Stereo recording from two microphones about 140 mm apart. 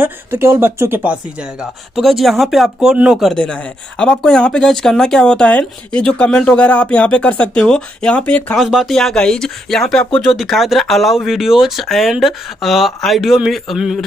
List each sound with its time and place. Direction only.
0.0 s speech: 15° right (ahead or behind)
1.6 s speech: centre (ahead or behind)
8.5 s speech: centre (ahead or behind)